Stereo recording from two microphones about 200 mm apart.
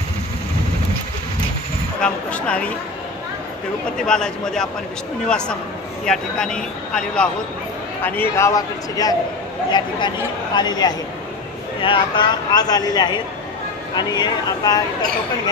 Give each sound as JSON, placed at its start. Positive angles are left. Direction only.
{"t": 2.0, "sound": "speech", "side_deg": 5}
{"t": 4.0, "sound": "speech", "side_deg": 5}
{"t": 6.0, "sound": "a man's voice", "side_deg": 5}